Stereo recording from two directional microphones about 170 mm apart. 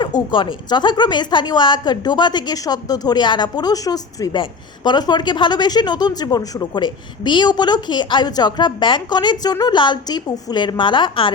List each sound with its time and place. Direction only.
0.0 s a woman's voice: 25° left (ahead or behind)